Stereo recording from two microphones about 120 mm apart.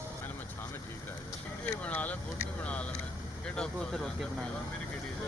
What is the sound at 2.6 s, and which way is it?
Vehicle, 10° left (ahead or behind).